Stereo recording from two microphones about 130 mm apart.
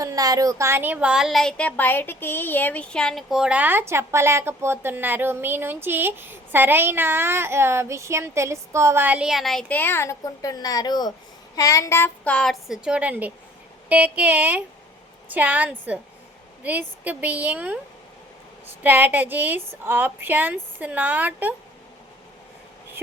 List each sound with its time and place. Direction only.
0.0 s a woman's voice: 25° right (ahead or behind); by 17.7 s 10° right (ahead or behind)
18.8 s speech: 15° right (ahead or behind)